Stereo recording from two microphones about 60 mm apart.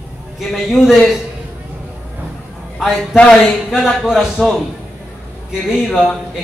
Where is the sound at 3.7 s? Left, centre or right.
Centre.